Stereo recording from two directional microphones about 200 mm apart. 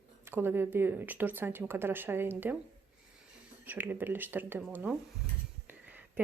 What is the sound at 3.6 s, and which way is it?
Speech, 10° right (ahead or behind).